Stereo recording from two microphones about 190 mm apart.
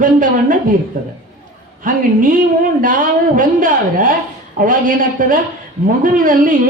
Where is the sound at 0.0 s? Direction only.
45° right (ahead or behind).